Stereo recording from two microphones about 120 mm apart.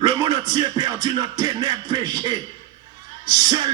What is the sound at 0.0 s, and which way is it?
Music, 35° right (ahead or behind).